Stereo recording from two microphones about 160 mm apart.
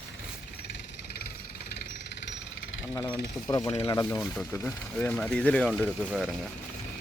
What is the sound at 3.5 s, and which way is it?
Speech, 25° left (ahead or behind).